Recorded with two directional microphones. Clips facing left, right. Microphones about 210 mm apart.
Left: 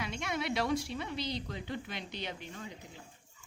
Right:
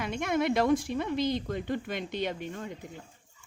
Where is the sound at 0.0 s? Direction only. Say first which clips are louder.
Right 8 dB; 50° right (ahead or behind).